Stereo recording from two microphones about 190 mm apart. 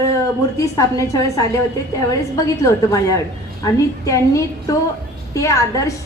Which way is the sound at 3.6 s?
15° left (ahead or behind).